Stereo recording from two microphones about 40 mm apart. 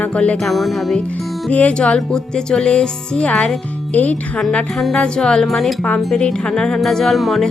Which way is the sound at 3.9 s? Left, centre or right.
Left.